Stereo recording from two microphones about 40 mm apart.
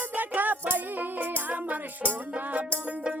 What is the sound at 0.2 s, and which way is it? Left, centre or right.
Music, right.